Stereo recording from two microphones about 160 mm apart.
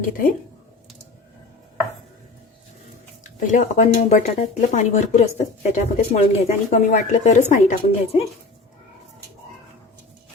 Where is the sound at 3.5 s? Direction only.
50° left (ahead or behind).